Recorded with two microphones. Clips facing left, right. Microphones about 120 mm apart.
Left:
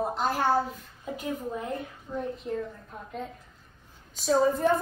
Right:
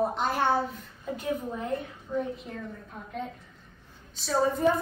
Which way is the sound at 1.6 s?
Centre (ahead or behind).